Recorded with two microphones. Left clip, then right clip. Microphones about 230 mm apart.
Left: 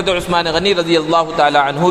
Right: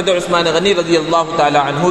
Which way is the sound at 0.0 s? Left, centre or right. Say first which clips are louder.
Right 2 dB; left.